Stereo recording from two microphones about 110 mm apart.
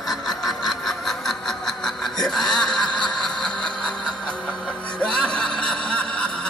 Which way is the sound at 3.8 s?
5° left (ahead or behind).